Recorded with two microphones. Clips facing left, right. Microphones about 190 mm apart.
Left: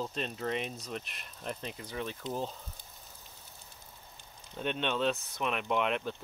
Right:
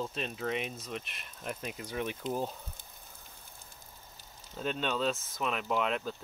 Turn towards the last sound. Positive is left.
turn(degrees=0)  # may be behind; listen again after turning